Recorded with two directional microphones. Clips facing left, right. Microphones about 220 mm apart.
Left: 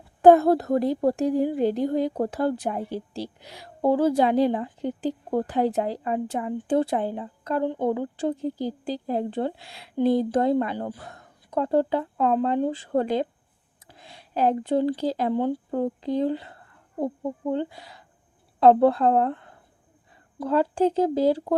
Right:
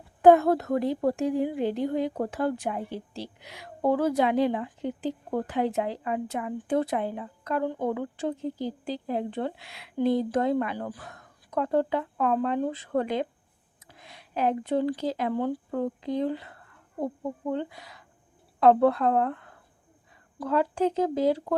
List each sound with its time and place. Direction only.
0.2 s a woman's voice: 35° left (ahead or behind)